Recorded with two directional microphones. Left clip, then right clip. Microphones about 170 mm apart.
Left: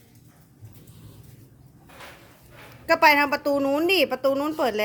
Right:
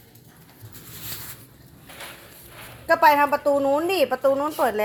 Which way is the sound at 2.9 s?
25° left (ahead or behind).